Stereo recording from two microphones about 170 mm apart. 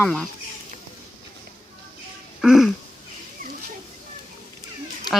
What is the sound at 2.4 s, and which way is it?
Speech, centre (ahead or behind).